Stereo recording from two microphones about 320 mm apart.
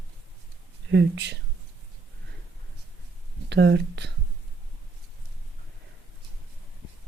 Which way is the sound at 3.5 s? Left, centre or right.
Right.